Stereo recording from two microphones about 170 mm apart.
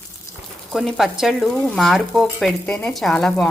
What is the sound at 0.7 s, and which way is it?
Speech, centre (ahead or behind).